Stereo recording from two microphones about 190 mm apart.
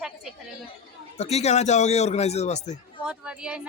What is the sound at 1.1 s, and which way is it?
A man's voice, 35° left (ahead or behind).